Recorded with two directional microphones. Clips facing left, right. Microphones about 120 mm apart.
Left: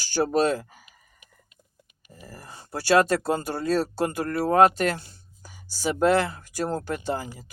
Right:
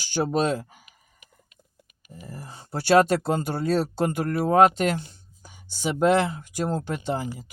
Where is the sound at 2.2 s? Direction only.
25° right (ahead or behind).